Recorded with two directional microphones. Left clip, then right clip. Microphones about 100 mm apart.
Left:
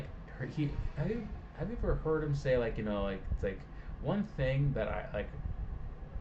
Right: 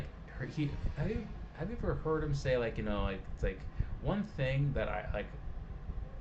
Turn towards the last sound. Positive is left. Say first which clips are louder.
# left 1 dB
turn(degrees=-15)  # may be behind; listen again after turning